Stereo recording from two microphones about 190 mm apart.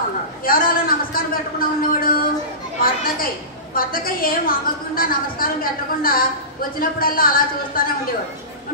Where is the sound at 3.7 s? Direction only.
50° left (ahead or behind).